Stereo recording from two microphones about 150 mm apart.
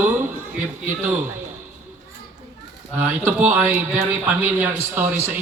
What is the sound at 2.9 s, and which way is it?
Speech, 15° right (ahead or behind).